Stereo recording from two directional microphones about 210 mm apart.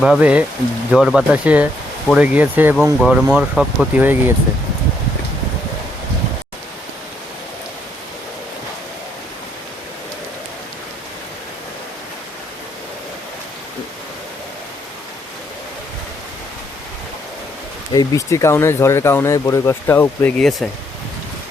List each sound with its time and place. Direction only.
0.0 s speech: 5° right (ahead or behind)
17.9 s speech: 15° left (ahead or behind)